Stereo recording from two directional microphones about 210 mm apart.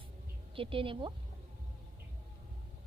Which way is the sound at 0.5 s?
25° right (ahead or behind).